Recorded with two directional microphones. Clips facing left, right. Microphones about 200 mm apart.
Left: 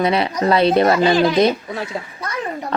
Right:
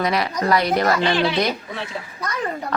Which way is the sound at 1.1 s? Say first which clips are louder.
Left 5 dB; 40° left (ahead or behind).